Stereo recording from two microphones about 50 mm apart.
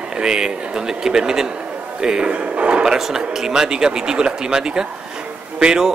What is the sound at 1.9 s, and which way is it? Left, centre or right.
Drawer open or close, centre.